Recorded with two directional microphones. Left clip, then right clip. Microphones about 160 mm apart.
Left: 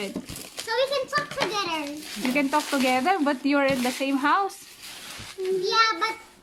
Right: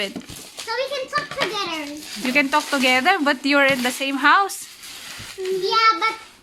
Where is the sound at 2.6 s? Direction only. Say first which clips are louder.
Right 4 dB; 10° right (ahead or behind).